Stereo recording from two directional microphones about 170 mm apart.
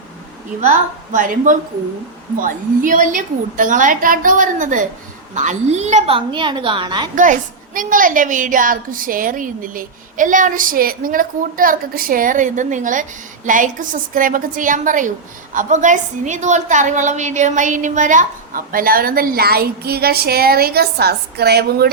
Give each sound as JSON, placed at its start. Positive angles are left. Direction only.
{"t": 0.6, "sound": "a woman's voice", "side_deg": -45}
{"t": 7.2, "sound": "a woman's voice", "side_deg": -50}